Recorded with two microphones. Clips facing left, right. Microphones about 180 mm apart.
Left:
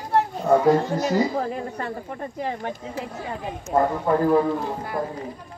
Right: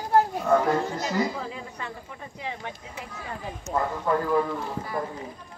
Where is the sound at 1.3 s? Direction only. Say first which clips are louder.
Left 8 dB; 50° left (ahead or behind).